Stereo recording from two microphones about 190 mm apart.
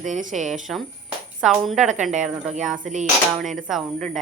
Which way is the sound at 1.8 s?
40° right (ahead or behind).